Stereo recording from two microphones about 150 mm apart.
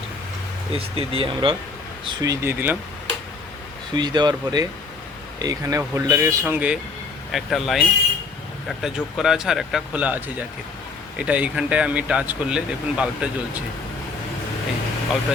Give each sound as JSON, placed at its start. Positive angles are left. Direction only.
{"t": 0.7, "sound": "speech", "side_deg": -40}
{"t": 2.2, "sound": "speech", "side_deg": -20}
{"t": 3.9, "sound": "speech", "side_deg": -30}